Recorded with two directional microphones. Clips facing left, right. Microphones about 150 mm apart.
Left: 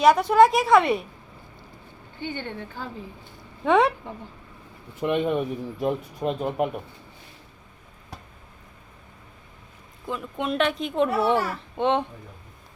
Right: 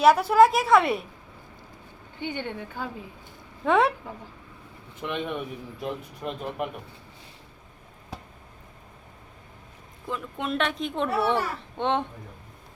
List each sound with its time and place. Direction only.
0.0 s a child's voice: 5° right (ahead or behind)
2.1 s a woman's voice: 15° right (ahead or behind)
3.6 s a child's voice: centre (ahead or behind)
5.0 s speech: 30° left (ahead or behind)
5.8 s speech: 45° left (ahead or behind)
10.1 s a child's voice: centre (ahead or behind)